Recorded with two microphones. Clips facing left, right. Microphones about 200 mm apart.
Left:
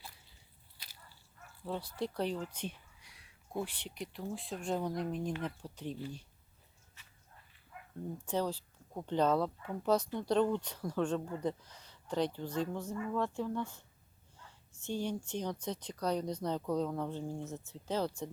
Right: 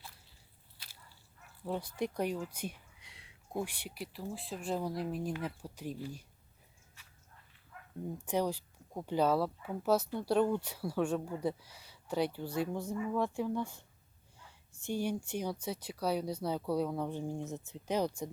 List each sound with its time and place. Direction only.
1.6 s speech: 15° right (ahead or behind)
3.0 s a sound: 25° right (ahead or behind)
3.6 s speech: 10° right (ahead or behind)
8.3 s speech: 15° right (ahead or behind)